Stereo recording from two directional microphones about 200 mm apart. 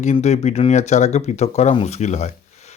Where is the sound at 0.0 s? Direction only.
35° left (ahead or behind).